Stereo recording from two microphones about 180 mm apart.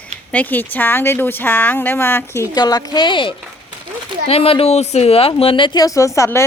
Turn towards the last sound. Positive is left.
turn(degrees=15)  # may be behind; listen again after turning